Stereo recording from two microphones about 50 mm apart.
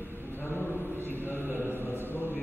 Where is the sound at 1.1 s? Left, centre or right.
Left.